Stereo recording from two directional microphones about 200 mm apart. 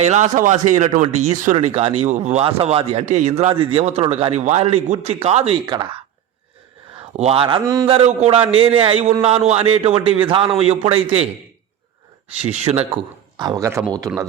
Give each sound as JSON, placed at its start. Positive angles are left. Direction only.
{"t": 0.0, "sound": "speech", "side_deg": -35}
{"t": 7.2, "sound": "speech", "side_deg": -30}
{"t": 7.9, "sound": "speech", "side_deg": -30}
{"t": 12.5, "sound": "speech", "side_deg": -30}